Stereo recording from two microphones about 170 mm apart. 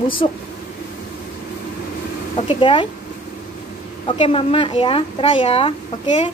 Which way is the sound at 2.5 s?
30° left (ahead or behind).